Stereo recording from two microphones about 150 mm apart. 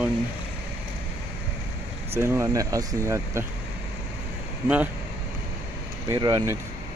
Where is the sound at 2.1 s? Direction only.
15° right (ahead or behind).